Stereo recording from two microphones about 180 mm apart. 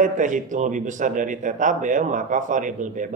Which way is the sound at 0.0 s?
45° right (ahead or behind).